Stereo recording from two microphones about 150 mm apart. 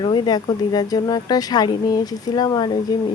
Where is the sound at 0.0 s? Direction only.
30° left (ahead or behind).